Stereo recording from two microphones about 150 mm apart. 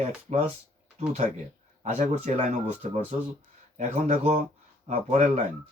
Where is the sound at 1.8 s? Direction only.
50° right (ahead or behind).